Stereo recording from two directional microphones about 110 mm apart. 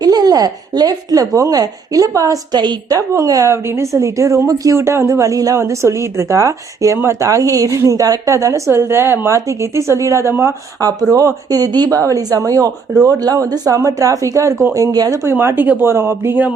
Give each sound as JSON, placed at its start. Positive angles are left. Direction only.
{"t": 0.0, "sound": "a woman's voice", "side_deg": -35}
{"t": 3.2, "sound": "a woman's voice", "side_deg": -30}